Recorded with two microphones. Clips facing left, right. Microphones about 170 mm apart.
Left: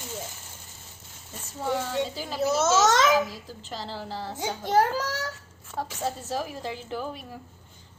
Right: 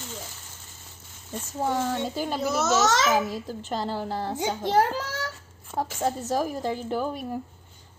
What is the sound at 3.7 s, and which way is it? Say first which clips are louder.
Speech: right 6 dB; 50° right (ahead or behind).